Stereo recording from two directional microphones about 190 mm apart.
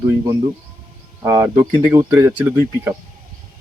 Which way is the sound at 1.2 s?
15° right (ahead or behind).